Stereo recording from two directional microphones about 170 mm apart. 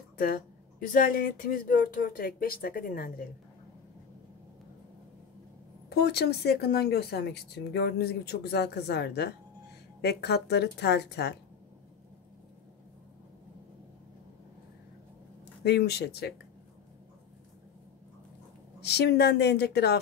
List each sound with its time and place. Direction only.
0.2 s speech: 60° left (ahead or behind)
5.9 s speech: 75° left (ahead or behind)
15.6 s speech: 75° left (ahead or behind)
18.8 s speech: 75° left (ahead or behind)